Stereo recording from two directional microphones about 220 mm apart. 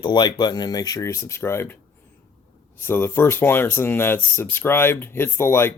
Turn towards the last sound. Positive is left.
turn(degrees=10)  # may be behind; listen again after turning